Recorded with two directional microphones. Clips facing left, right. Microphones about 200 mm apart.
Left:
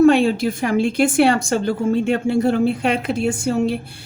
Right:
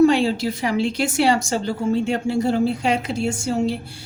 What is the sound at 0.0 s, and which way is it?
A woman's voice, 55° left (ahead or behind).